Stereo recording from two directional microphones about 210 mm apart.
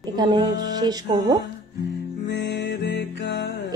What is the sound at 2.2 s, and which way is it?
Music, 55° left (ahead or behind).